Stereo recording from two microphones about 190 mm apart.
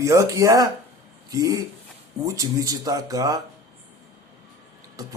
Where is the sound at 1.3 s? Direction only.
20° right (ahead or behind).